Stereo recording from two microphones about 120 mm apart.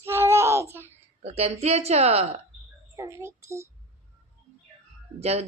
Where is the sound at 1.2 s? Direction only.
60° right (ahead or behind).